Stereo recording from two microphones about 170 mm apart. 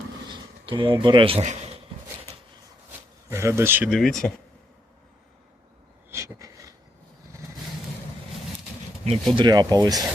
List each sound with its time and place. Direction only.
0.3 s speech: 25° right (ahead or behind)
3.2 s speech: 15° right (ahead or behind)
3.8 s speech: centre (ahead or behind)
6.1 s a sound: 15° right (ahead or behind)
9.3 s speech: 25° right (ahead or behind)